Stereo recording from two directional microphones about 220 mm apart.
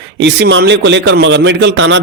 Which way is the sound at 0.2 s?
50° right (ahead or behind).